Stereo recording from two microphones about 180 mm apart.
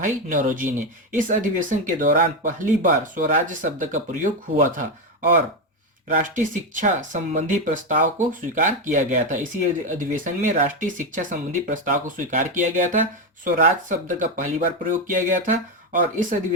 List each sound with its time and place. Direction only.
0.0 s speech: 50° right (ahead or behind)
6.1 s speech: 45° right (ahead or behind)